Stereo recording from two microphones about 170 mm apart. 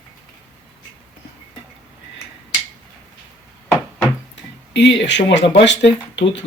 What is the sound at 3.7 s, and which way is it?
Knock, 10° left (ahead or behind).